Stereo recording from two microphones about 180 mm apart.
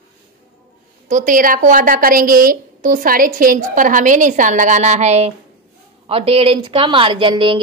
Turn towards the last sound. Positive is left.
turn(degrees=-30)  # may be behind; listen again after turning